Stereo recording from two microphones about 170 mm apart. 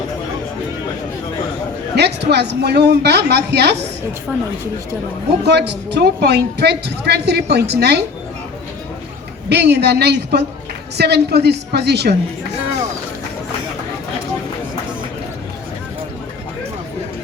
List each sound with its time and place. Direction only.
2.0 s a woman's voice: 75° right (ahead or behind)
4.3 s speech: 10° right (ahead or behind)
5.5 s a woman's voice: 80° right
9.5 s a woman's voice: 80° right